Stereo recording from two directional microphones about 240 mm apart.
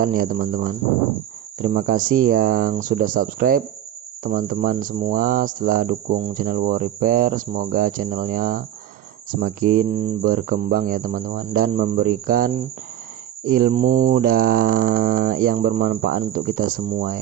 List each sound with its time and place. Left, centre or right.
0.0 s speech: right